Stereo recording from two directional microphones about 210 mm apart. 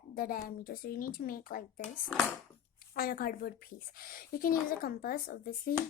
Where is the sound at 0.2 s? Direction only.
45° left (ahead or behind).